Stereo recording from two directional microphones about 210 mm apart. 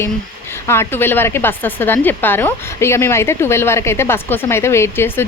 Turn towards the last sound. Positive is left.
turn(degrees=10)  # may be behind; listen again after turning